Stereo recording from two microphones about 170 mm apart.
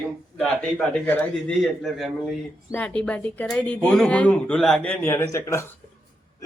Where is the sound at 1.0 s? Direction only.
10° left (ahead or behind).